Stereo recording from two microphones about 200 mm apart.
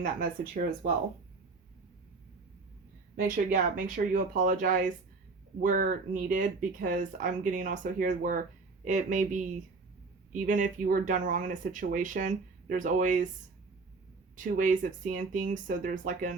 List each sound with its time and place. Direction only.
0.0 s speech: 40° right (ahead or behind)
3.2 s speech: 45° right (ahead or behind)
14.3 s speech: 40° right (ahead or behind)